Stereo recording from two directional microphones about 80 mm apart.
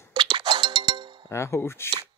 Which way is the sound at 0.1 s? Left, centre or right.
Right.